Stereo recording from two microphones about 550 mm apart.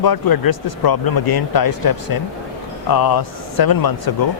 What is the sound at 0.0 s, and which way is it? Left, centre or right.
Speech, left.